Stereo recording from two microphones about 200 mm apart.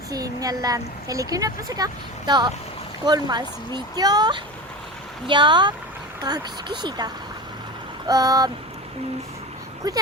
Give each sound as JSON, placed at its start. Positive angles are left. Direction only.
{"t": 0.1, "sound": "a woman's voice", "side_deg": -20}
{"t": 9.8, "sound": "speech", "side_deg": -20}